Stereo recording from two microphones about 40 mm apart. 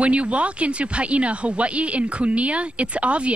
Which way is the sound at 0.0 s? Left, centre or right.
Right.